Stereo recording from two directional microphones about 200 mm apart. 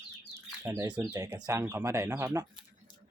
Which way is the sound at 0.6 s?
15° right (ahead or behind).